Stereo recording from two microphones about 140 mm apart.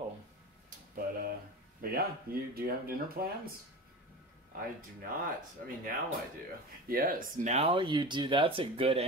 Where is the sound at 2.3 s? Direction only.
90° right.